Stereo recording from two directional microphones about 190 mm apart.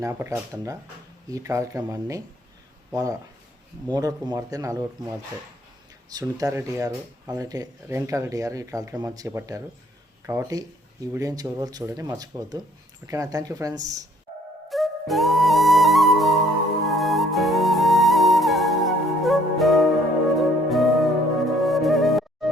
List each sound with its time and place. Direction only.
0.0 s speech: 15° right (ahead or behind)
6.1 s speech: 20° right (ahead or behind)
14.7 s music: centre (ahead or behind)